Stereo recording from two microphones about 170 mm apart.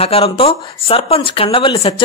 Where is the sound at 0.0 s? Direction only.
35° left (ahead or behind).